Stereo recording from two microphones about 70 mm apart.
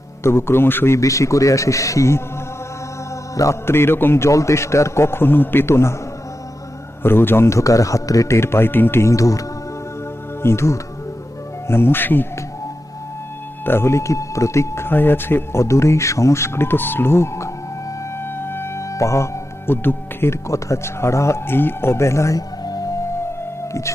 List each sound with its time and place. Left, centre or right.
0.2 s speech: left
0.9 s a man's voice: left
3.3 s speech: left
7.0 s a man's voice: left
8.4 s speech: left
10.4 s speech: left
13.7 s a man's voice: left
14.8 s speech: left
18.3 s music: left
20.5 s speech: left
22.4 s music: left